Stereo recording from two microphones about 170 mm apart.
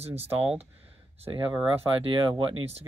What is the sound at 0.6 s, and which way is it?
Speech, 35° right (ahead or behind).